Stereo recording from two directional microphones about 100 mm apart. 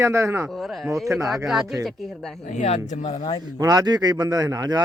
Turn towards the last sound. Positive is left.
turn(degrees=-40)  # may be behind; listen again after turning